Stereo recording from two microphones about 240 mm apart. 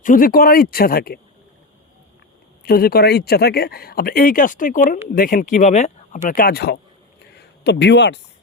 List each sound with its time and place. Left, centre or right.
0.0 s speech: left
2.6 s speech: left